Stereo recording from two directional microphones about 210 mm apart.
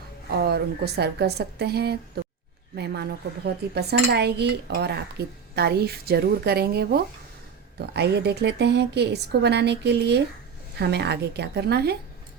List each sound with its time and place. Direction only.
0.3 s speech: 50° right (ahead or behind)